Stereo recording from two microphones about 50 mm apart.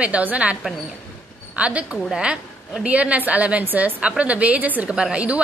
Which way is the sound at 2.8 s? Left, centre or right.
Right.